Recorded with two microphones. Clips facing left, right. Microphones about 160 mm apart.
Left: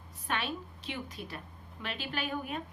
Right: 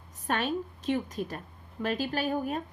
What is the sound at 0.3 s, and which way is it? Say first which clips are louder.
A woman's voice: right 6 dB; 45° right (ahead or behind).